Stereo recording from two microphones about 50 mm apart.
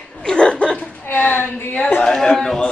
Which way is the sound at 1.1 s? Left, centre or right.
Left.